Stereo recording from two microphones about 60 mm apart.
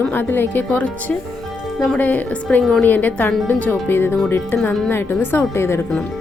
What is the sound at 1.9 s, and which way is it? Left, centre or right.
A woman's voice, left.